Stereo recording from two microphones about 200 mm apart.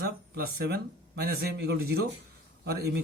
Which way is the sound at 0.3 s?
50° right (ahead or behind).